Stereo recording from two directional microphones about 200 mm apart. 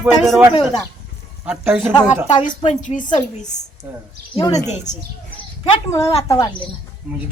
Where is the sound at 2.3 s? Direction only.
35° left (ahead or behind).